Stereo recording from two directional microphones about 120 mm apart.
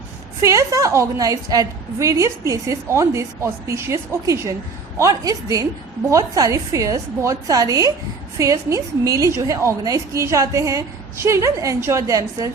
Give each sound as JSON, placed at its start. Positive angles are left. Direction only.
{"t": 0.4, "sound": "a woman's voice", "side_deg": -30}